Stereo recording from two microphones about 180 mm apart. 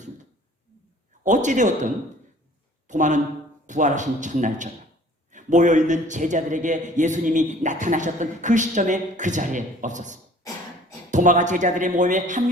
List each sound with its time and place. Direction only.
1.2 s a man's voice: 45° right (ahead or behind)